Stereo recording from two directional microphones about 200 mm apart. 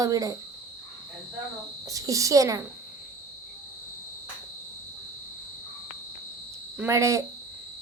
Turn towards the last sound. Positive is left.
turn(degrees=-15)  # may be behind; listen again after turning